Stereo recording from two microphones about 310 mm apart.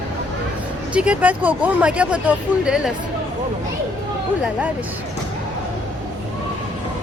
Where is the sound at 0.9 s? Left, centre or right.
Centre.